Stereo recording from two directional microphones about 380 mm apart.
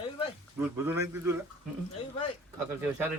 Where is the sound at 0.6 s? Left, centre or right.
Centre.